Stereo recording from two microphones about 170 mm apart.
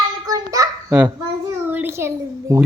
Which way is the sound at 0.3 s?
20° right (ahead or behind).